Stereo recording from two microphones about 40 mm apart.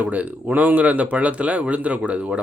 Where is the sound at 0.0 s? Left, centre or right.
Right.